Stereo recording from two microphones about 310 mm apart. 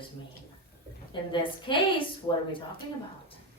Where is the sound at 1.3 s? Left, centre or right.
Centre.